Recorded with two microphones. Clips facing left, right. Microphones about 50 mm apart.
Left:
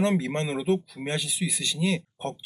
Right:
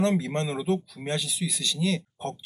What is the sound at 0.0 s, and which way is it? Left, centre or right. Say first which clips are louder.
Speech: even; left.